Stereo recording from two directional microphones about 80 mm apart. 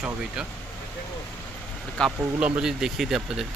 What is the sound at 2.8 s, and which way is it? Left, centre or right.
Speech, centre.